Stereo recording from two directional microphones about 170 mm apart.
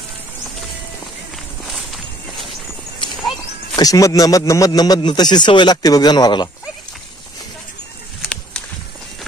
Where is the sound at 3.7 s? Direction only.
20° left (ahead or behind).